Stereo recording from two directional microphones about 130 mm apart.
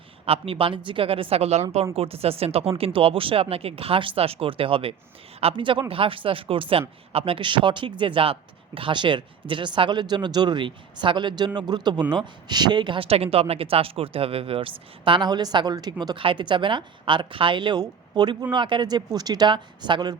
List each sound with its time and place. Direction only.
0.3 s speech: 45° right (ahead or behind)